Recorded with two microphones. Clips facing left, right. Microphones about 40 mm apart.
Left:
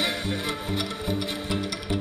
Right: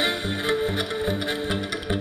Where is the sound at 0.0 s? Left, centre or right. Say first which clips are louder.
Right 3 dB; right.